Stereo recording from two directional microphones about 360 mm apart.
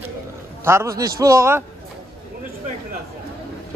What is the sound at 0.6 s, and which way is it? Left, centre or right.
Speech, centre.